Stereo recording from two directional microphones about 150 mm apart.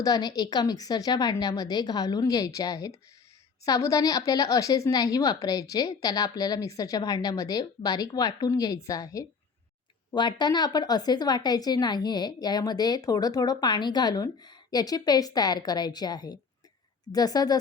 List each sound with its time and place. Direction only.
0.0 s a woman's voice: 25° left (ahead or behind)